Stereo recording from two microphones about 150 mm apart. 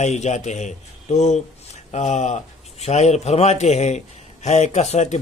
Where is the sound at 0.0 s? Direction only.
50° left (ahead or behind).